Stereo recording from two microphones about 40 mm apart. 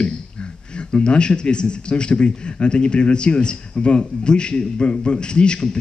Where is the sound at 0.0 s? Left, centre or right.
Left.